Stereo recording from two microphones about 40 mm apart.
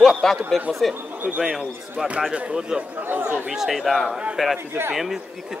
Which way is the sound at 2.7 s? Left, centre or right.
Centre.